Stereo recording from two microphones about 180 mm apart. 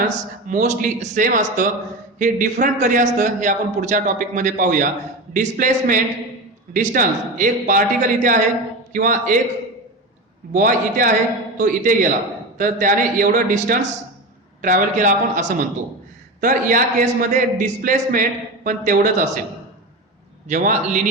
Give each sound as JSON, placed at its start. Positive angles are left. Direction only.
{"t": 0.0, "sound": "a man's voice", "side_deg": -40}
{"t": 10.5, "sound": "a man's voice", "side_deg": -45}
{"t": 20.5, "sound": "a man's voice", "side_deg": -45}